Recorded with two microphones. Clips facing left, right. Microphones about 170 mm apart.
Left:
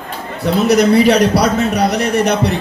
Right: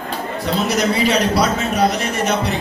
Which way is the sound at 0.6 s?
65° left (ahead or behind).